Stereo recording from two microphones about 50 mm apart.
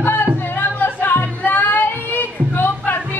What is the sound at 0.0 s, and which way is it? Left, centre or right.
Music, left.